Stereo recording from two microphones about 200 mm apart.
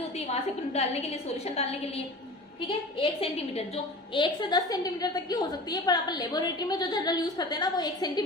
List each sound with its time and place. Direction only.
0.7 s a woman's voice: 30° left (ahead or behind)